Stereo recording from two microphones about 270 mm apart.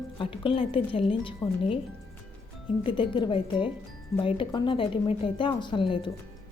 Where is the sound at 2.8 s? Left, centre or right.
Centre.